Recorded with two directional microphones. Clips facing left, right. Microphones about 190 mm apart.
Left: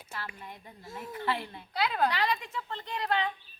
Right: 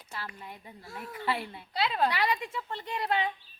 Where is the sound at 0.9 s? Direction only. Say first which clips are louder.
Left 1 dB; 20° left (ahead or behind).